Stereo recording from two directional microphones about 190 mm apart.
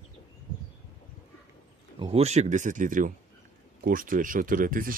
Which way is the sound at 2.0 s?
30° right (ahead or behind).